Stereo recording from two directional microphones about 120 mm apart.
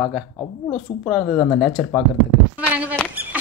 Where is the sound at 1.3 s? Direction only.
15° left (ahead or behind).